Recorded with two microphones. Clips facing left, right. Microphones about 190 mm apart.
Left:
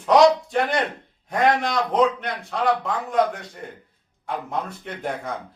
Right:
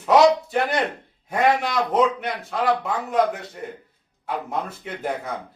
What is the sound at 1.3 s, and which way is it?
A man's voice, 5° right (ahead or behind).